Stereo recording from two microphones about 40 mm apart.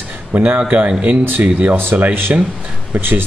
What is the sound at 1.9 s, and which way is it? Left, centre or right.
Speech, right.